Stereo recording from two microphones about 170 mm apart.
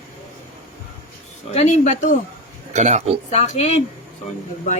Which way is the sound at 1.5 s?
40° left (ahead or behind).